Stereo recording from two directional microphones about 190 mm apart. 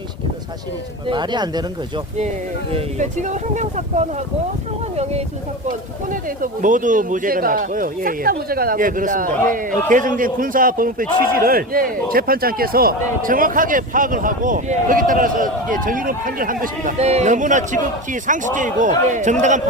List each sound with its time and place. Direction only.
1.0 s speech: 25° right (ahead or behind)
2.7 s speech: 40° right (ahead or behind)
6.1 s a man's voice: 45° right (ahead or behind)